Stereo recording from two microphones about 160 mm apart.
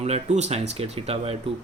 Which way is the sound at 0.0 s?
45° right (ahead or behind).